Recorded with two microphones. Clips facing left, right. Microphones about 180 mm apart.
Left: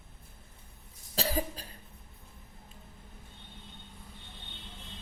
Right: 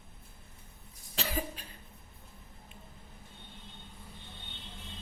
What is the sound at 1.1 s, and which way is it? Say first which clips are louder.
Cough: left 4 dB; 35° left (ahead or behind).